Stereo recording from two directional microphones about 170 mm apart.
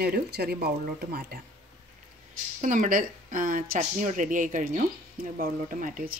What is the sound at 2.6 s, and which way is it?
Speech, 50° right (ahead or behind).